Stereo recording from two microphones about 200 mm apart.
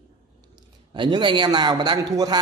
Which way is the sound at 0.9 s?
25° right (ahead or behind).